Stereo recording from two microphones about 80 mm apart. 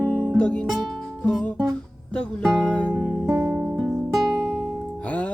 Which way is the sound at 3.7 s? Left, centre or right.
Centre.